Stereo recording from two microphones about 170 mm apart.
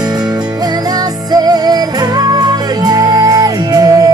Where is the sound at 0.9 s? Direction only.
20° right (ahead or behind).